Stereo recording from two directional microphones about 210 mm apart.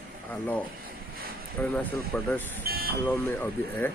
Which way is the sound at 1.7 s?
10° left (ahead or behind).